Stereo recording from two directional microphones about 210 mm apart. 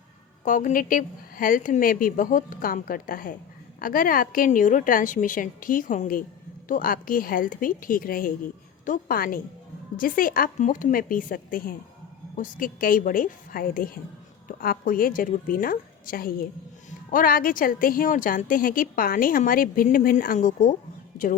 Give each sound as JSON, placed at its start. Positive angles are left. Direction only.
{"t": 0.4, "sound": "a woman's voice", "side_deg": 40}